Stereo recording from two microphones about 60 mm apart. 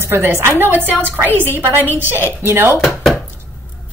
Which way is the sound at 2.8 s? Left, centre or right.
Centre.